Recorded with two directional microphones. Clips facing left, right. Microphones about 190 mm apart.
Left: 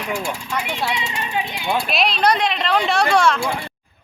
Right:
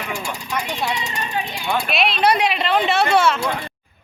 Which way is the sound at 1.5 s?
20° left (ahead or behind).